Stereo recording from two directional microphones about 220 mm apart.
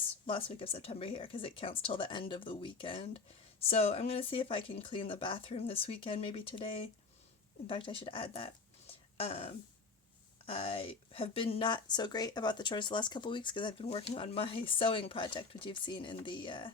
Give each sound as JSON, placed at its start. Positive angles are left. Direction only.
{"t": 0.3, "sound": "speech", "side_deg": 25}
{"t": 10.5, "sound": "speech", "side_deg": 25}